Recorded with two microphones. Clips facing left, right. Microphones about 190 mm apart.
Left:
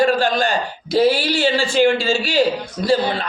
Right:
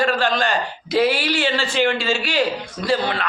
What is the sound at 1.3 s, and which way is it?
A man's voice, 5° left (ahead or behind).